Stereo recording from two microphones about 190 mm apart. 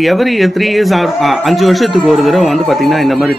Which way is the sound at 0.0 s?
Centre (ahead or behind).